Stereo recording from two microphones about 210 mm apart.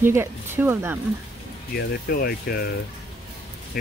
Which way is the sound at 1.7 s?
45° left (ahead or behind).